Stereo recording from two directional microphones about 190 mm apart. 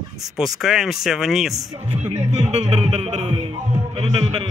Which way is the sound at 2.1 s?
35° right (ahead or behind).